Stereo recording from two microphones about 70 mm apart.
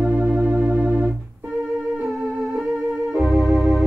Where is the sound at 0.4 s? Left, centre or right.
Right.